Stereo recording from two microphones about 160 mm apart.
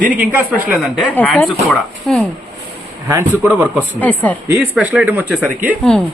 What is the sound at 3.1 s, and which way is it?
Speech, 15° right (ahead or behind).